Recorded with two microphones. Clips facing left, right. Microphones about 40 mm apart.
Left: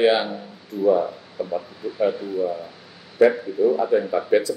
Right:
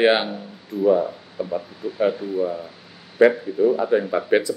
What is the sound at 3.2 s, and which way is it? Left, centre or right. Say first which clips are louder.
Speech: right 1 dB; right.